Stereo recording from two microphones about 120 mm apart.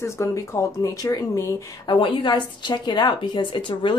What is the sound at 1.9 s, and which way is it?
A woman's voice, 45° left (ahead or behind).